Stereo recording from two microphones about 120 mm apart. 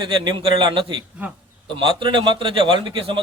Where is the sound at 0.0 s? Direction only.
40° right (ahead or behind).